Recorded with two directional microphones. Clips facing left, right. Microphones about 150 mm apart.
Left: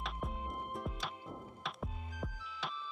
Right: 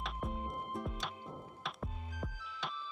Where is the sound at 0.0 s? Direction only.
Centre (ahead or behind).